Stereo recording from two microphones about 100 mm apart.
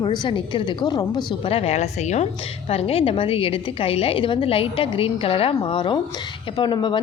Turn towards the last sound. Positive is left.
turn(degrees=55)  # may be behind; listen again after turning